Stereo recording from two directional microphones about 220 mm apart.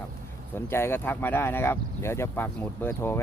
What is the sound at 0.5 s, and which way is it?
Speech, 10° left (ahead or behind).